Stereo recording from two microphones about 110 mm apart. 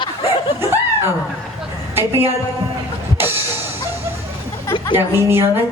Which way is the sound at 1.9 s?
20° right (ahead or behind).